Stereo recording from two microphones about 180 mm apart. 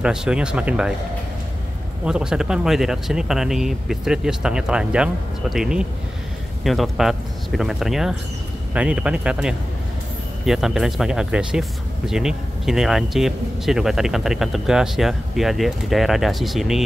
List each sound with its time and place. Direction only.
0.0 s speech: 5° right (ahead or behind)
2.0 s speech: 5° right (ahead or behind)